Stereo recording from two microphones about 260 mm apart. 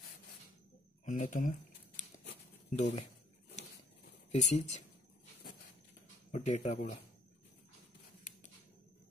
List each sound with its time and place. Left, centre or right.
1.0 s speech: left
2.8 s speech: left
4.3 s speech: left
6.3 s speech: left